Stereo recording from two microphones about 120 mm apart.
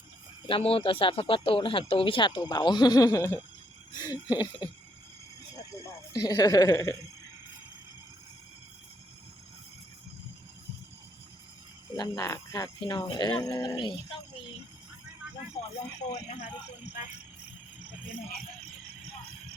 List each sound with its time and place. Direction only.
0.4 s speech: 50° left (ahead or behind)
5.7 s speech: 30° left (ahead or behind)
11.9 s speech: 30° left (ahead or behind)
12.8 s speech: 35° left (ahead or behind)
15.6 s speech: 55° left (ahead or behind)
16.1 s speech: 70° left (ahead or behind)